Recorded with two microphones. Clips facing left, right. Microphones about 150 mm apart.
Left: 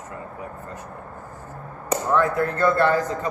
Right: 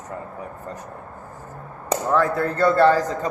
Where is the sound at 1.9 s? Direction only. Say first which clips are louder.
Right 1 dB; 35° right (ahead or behind).